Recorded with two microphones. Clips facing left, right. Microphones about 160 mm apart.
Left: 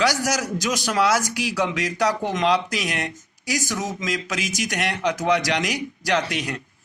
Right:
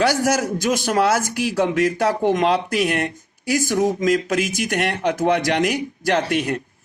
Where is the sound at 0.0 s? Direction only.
55° right (ahead or behind).